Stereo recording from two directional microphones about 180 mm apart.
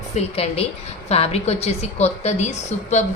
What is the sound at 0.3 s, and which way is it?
A woman's voice, 35° left (ahead or behind).